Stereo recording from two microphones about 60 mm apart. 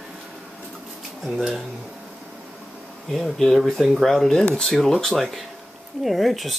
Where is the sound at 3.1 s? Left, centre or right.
Centre.